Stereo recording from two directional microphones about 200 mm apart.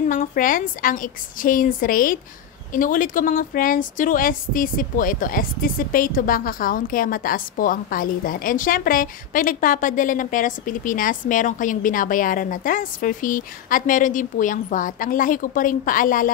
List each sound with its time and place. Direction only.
0.1 s speech: 40° left (ahead or behind)